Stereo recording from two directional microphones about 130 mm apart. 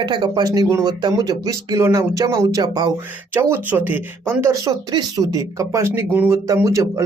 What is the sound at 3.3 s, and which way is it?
Speech, 15° right (ahead or behind).